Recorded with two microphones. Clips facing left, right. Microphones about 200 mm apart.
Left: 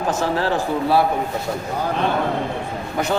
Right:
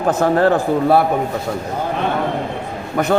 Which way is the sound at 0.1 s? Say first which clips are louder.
Right 8 dB; 55° right (ahead or behind).